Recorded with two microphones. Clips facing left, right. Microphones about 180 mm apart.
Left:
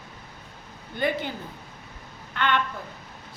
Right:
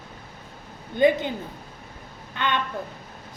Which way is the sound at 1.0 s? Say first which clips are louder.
Right 7 dB; 20° right (ahead or behind).